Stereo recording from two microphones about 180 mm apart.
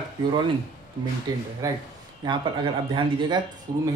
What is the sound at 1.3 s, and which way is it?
Speech, 20° right (ahead or behind).